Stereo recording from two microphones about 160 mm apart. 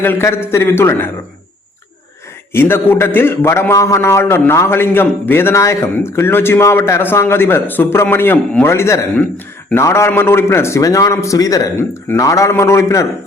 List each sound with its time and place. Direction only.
0.0 s a man's voice: 15° left (ahead or behind)
2.5 s a man's voice: 15° left (ahead or behind)